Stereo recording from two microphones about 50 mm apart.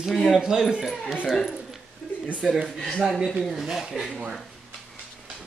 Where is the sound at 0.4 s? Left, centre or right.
Centre.